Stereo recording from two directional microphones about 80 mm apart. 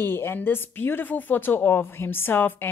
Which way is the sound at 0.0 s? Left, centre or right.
Left.